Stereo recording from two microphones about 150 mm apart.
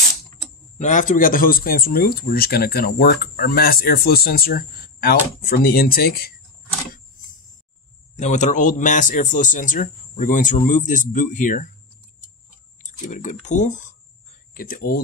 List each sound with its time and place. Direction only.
0.7 s speech: 55° left (ahead or behind); by 6.3 s 85° left
8.2 s speech: 50° left (ahead or behind)
13.0 s speech: 60° left (ahead or behind)
14.5 s speech: 70° left (ahead or behind)